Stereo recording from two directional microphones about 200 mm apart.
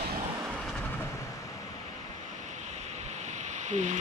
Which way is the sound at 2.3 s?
35° right (ahead or behind).